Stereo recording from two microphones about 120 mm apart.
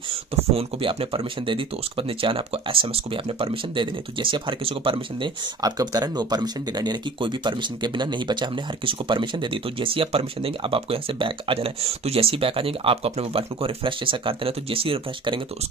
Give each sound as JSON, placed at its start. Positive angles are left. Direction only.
{"t": 0.1, "sound": "speech", "side_deg": -50}
{"t": 5.6, "sound": "speech", "side_deg": -35}